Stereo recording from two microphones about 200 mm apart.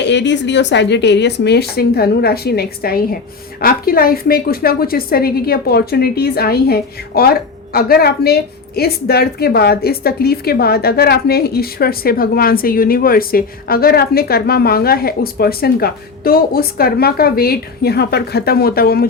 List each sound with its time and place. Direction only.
0.0 s a woman's voice: 60° left (ahead or behind)